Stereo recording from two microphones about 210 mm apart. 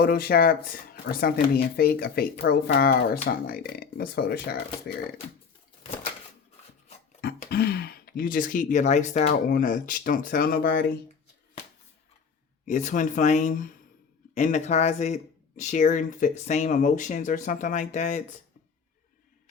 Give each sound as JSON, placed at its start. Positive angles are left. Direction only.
{"t": 0.0, "sound": "speech", "side_deg": 45}
{"t": 7.5, "sound": "speech", "side_deg": 50}
{"t": 12.6, "sound": "speech", "side_deg": 35}